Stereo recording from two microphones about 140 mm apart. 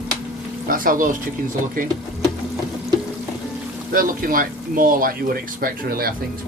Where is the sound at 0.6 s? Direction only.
85° right.